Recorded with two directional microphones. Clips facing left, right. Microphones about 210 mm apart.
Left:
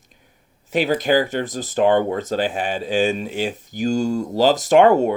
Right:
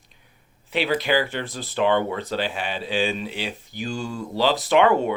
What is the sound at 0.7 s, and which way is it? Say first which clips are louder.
Speech: left 4 dB; 45° left (ahead or behind).